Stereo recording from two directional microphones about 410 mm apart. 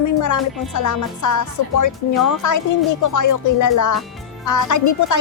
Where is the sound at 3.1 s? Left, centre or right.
Left.